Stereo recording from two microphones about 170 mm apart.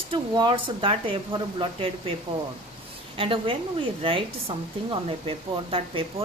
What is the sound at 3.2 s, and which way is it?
Speech, 30° right (ahead or behind).